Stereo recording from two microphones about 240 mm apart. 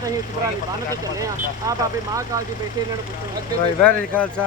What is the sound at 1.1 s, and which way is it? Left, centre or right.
Speech, centre.